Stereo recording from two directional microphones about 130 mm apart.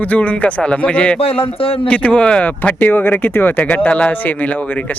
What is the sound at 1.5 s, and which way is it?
Speech, 45° left (ahead or behind).